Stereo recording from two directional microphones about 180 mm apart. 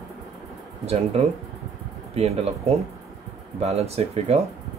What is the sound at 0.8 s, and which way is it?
Speech, 35° right (ahead or behind).